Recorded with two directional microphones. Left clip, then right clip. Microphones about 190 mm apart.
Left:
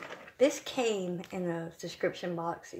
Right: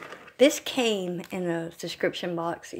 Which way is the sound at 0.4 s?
40° right (ahead or behind).